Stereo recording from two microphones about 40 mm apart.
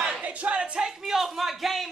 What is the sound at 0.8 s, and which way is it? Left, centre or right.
A man's voice, centre.